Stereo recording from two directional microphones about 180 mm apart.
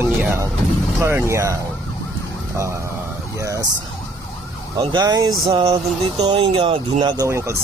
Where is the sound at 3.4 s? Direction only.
15° right (ahead or behind).